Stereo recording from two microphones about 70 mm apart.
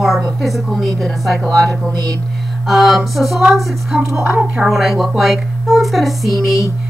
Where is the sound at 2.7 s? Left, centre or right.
Centre.